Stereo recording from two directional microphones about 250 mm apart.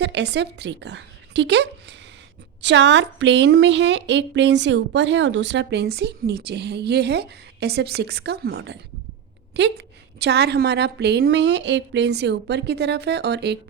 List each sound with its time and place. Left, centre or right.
0.0 s a woman's voice: right